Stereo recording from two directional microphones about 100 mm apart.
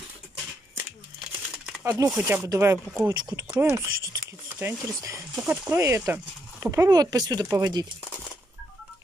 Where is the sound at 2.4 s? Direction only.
35° right (ahead or behind).